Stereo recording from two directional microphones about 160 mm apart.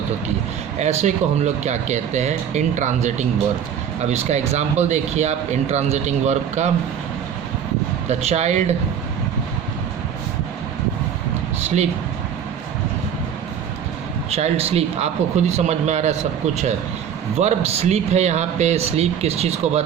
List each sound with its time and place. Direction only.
0.8 s speech: 45° right (ahead or behind)
8.0 s speech: 45° right (ahead or behind)
11.6 s a sound: 45° right (ahead or behind)
14.3 s speech: 40° right (ahead or behind)
17.3 s speech: 40° right (ahead or behind)